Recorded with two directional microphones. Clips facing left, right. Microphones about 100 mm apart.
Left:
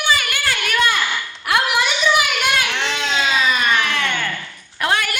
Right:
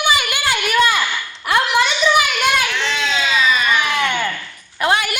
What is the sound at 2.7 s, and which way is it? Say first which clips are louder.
Baby cry: right 1 dB; 55° left (ahead or behind).